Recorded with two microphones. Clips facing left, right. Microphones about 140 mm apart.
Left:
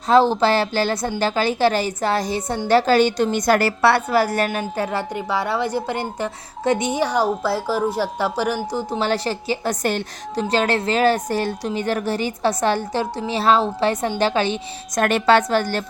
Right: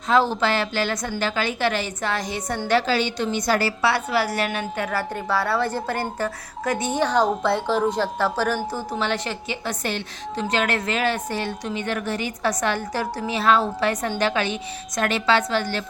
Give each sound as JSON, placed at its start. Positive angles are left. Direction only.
{"t": 0.1, "sound": "a woman's voice", "side_deg": 30}
{"t": 5.1, "sound": "a woman's voice", "side_deg": 15}
{"t": 9.0, "sound": "a woman's voice", "side_deg": 35}
{"t": 10.5, "sound": "a woman's voice", "side_deg": 30}
{"t": 15.0, "sound": "a woman's voice", "side_deg": 50}